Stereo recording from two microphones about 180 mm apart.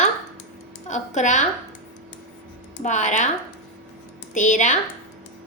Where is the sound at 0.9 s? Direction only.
40° left (ahead or behind).